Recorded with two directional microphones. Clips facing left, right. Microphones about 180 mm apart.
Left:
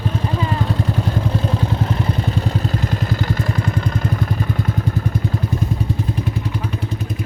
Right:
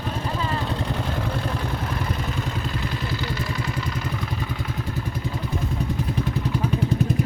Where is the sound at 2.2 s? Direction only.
35° left (ahead or behind).